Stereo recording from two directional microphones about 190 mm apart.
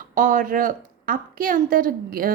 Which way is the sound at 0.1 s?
45° right (ahead or behind).